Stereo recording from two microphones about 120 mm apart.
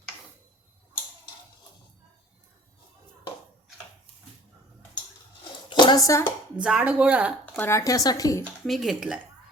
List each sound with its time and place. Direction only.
5.6 s a sound: 40° left (ahead or behind)
6.6 s speech: 10° right (ahead or behind)
7.4 s speech: 20° left (ahead or behind)
8.6 s speech: centre (ahead or behind)